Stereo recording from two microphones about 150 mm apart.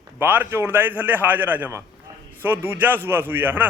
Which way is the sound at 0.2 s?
15° right (ahead or behind).